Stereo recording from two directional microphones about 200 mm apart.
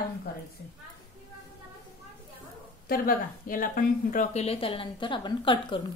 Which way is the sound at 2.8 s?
45° left (ahead or behind).